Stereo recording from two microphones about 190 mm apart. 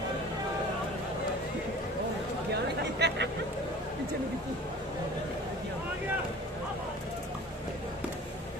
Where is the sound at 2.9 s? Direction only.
60° right (ahead or behind).